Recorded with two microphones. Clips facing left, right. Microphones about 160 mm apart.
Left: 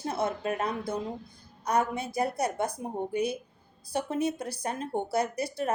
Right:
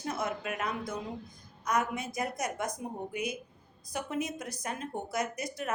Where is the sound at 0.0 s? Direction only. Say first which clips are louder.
Left 4 dB; 30° left (ahead or behind).